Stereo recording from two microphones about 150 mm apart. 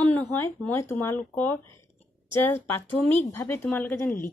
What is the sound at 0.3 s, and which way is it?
Speech, 15° left (ahead or behind).